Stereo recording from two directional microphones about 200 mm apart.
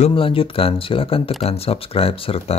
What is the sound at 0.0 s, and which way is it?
Speech, 25° left (ahead or behind).